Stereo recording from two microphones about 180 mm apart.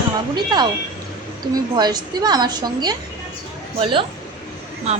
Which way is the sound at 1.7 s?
20° right (ahead or behind).